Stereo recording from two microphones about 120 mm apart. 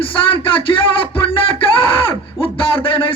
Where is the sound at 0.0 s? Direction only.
50° left (ahead or behind).